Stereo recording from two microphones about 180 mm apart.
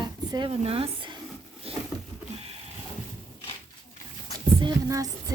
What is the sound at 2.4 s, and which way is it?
Printer, 35° right (ahead or behind).